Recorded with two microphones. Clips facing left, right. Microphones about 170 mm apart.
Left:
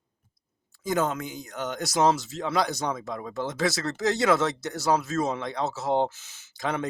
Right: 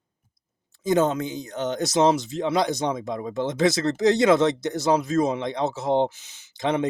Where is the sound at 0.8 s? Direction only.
20° right (ahead or behind).